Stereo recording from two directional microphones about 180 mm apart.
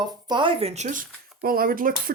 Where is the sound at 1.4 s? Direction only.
55° right (ahead or behind).